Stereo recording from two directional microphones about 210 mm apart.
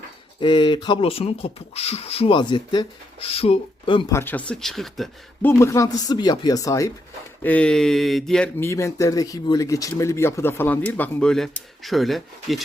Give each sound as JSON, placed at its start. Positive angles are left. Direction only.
{"t": 0.3, "sound": "speech", "side_deg": 25}
{"t": 4.1, "sound": "speech", "side_deg": 10}
{"t": 8.7, "sound": "speech", "side_deg": 15}